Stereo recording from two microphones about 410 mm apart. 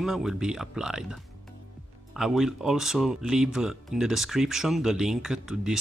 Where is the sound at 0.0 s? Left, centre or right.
Centre.